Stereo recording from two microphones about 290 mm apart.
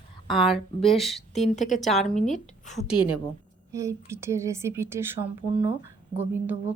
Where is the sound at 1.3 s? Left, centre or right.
Left.